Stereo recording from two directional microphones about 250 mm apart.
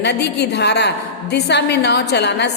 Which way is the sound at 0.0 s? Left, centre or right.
Left.